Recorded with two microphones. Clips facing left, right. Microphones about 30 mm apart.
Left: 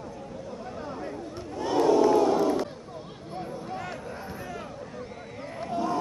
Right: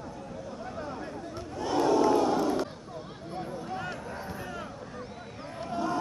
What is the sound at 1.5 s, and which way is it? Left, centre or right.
Battle cry, centre.